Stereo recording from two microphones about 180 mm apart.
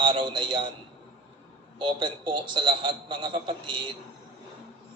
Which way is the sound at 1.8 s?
25° right (ahead or behind).